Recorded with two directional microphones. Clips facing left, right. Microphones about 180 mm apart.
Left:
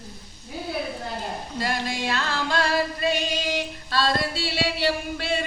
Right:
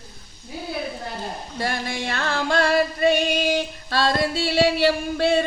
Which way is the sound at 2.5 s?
55° right (ahead or behind).